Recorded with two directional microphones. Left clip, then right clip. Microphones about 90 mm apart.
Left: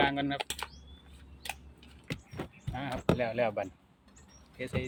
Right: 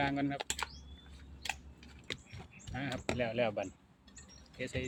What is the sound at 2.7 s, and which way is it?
Speech, 20° right (ahead or behind).